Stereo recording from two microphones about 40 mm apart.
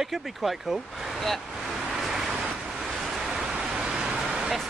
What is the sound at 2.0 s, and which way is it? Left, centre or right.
Vehicle, centre.